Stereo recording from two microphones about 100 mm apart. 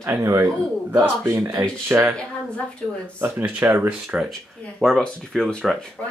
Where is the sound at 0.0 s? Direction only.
30° right (ahead or behind).